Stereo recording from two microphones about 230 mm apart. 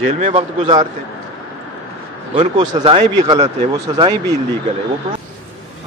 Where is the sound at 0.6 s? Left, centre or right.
Centre.